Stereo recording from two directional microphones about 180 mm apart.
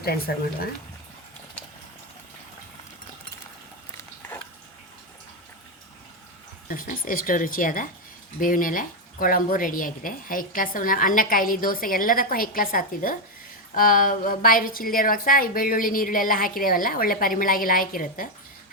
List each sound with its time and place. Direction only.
6.7 s speech: 50° left (ahead or behind)